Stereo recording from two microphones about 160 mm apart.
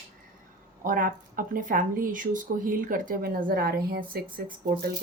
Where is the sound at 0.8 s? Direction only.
60° right (ahead or behind).